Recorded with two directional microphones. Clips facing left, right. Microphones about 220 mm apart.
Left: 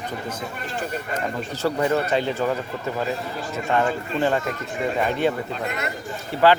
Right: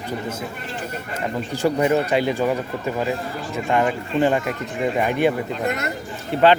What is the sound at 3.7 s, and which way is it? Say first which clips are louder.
Speech: right 2 dB; 15° right (ahead or behind).